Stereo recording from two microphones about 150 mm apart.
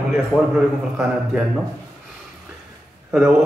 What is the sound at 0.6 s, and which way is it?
Speech, 10° right (ahead or behind).